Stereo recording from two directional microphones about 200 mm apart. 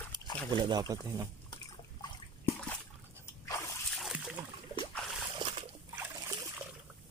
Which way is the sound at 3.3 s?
15° left (ahead or behind).